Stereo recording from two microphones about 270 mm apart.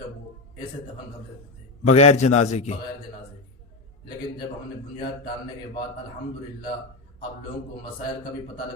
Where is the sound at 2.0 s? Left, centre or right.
Left.